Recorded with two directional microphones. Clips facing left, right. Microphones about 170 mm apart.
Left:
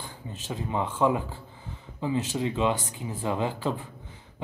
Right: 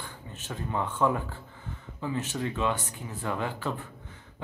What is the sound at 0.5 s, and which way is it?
Speech, 15° left (ahead or behind).